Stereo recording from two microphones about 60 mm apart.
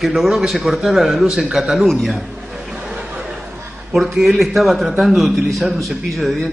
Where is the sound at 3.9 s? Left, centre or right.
Centre.